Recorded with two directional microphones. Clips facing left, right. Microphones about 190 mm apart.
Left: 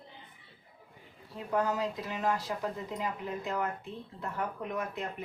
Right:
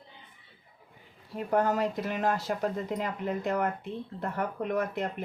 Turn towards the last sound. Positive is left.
turn(degrees=-75)  # may be behind; listen again after turning